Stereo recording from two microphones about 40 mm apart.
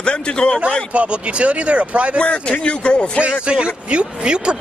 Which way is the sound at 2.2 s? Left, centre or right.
Left.